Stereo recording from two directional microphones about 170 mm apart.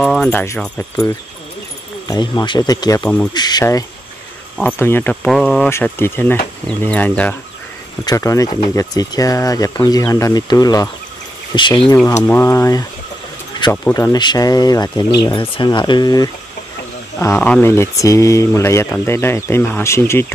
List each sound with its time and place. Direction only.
0.0 s speech: 5° left (ahead or behind)
5.7 s speech: 15° left (ahead or behind)
8.0 s speech: 20° left (ahead or behind)
12.2 s speech: 15° left (ahead or behind)
17.2 s speech: 10° left (ahead or behind)